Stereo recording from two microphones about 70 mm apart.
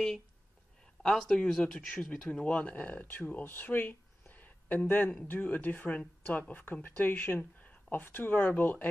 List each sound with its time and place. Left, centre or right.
1.0 s speech: centre